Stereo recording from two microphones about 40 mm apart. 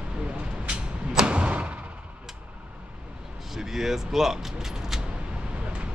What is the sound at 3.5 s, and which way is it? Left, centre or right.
Speech, centre.